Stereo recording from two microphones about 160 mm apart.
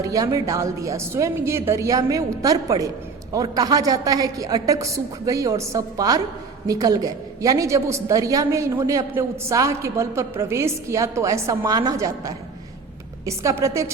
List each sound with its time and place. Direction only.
0.0 s a woman's voice: 20° right (ahead or behind)